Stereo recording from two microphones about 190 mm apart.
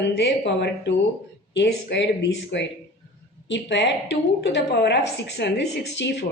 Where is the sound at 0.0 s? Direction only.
65° left (ahead or behind).